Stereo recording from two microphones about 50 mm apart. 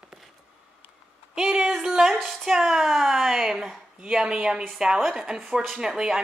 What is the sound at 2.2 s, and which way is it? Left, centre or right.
Music, centre.